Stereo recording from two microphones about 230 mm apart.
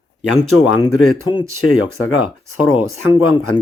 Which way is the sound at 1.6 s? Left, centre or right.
Left.